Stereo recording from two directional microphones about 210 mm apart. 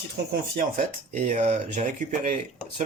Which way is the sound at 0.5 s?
40° right (ahead or behind).